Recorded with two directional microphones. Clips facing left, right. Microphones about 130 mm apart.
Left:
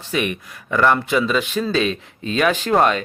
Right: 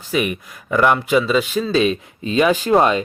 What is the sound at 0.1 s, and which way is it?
Speech, 5° right (ahead or behind).